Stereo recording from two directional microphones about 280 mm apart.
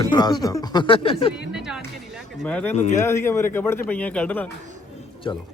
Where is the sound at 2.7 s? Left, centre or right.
Left.